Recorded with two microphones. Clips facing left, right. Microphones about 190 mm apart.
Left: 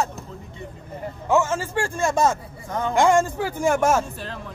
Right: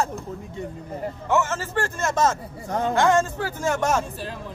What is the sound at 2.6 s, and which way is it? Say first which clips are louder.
Speech: right 2 dB; 40° right (ahead or behind).